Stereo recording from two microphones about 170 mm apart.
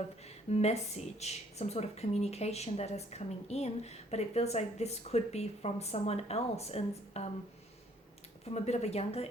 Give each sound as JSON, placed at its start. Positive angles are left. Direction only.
{"t": 0.3, "sound": "a woman's voice", "side_deg": 40}
{"t": 8.4, "sound": "a woman's voice", "side_deg": 40}